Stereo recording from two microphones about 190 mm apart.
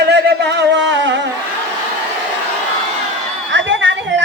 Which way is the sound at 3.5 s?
80° right.